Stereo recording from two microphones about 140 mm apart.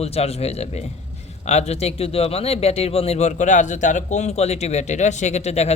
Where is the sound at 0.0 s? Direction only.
45° left (ahead or behind).